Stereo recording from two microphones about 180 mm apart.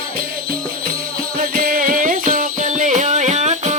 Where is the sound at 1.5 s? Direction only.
50° right (ahead or behind).